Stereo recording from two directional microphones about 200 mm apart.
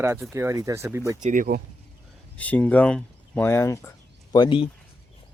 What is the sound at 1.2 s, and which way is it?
Speech, 40° right (ahead or behind).